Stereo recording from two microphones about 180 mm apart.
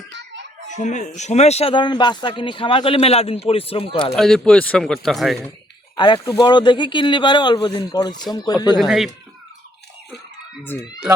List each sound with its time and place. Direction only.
0.8 s speech: 45° left (ahead or behind)
4.1 s a man's voice: centre (ahead or behind)
6.3 s speech: 25° left (ahead or behind)
8.8 s a man's voice: centre (ahead or behind)
10.6 s speech: 10° left (ahead or behind)